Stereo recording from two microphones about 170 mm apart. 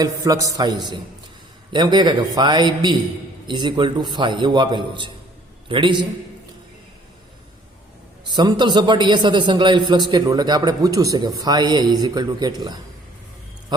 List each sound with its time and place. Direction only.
0.0 s a man's voice: 20° right (ahead or behind)
8.3 s a man's voice: 25° right (ahead or behind)